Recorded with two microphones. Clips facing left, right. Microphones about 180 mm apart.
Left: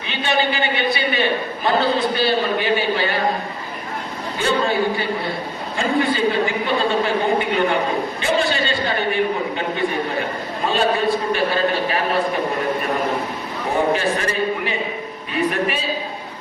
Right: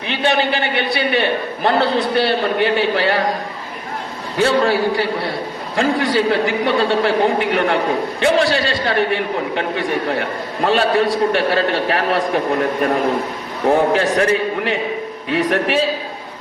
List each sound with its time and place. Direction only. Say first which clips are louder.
0.1 s a man's voice: right 3 dB; 60° right (ahead or behind); by 3.2 s 80° right
4.4 s a man's voice: right 4 dB; 85° right
13.7 s a man's voice: right 5 dB; 70° right (ahead or behind)